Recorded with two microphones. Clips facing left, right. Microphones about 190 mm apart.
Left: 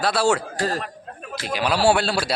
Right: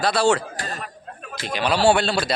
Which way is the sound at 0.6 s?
70° left (ahead or behind).